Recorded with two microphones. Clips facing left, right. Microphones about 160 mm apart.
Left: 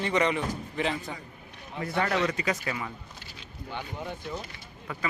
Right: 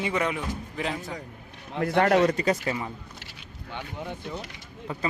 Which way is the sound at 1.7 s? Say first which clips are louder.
Right 7 dB; 55° right (ahead or behind).